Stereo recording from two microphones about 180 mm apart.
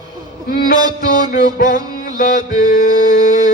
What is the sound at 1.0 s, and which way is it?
Music, 50° left (ahead or behind).